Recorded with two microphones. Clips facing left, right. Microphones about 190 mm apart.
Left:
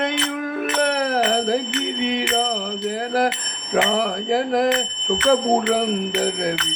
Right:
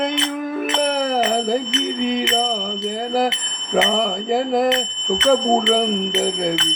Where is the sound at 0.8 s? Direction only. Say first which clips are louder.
Even; centre (ahead or behind).